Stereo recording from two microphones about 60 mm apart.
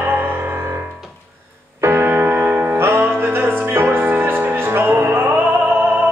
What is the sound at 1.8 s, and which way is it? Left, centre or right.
Music, right.